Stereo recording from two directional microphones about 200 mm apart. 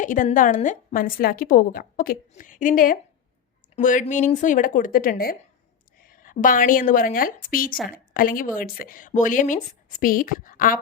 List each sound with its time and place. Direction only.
0.0 s a woman's voice: 40° left (ahead or behind)